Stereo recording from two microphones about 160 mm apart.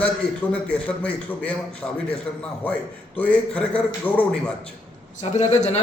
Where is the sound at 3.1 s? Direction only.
10° left (ahead or behind).